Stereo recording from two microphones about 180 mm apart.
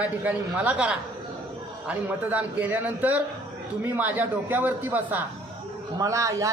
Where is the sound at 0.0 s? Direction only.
10° right (ahead or behind).